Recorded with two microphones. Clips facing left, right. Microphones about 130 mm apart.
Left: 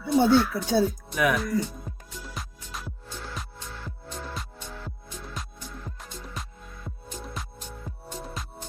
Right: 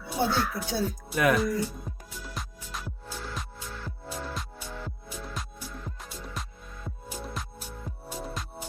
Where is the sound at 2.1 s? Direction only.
Centre (ahead or behind).